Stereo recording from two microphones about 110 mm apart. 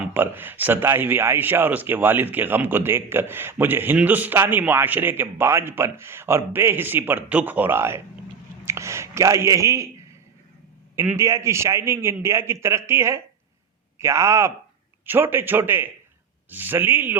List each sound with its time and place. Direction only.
0.0 s speech: 20° right (ahead or behind)
10.9 s a man's voice: 15° right (ahead or behind)
11.2 s a man's voice: 30° right (ahead or behind)